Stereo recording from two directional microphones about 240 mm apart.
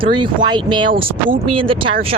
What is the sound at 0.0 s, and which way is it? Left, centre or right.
Speech, centre.